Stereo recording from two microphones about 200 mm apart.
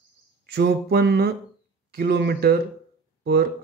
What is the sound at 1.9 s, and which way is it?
Speech, 55° right (ahead or behind).